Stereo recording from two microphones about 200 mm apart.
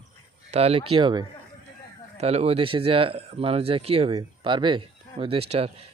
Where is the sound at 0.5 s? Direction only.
30° right (ahead or behind).